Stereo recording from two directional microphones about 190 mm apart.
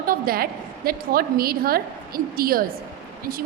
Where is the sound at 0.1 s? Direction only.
50° right (ahead or behind).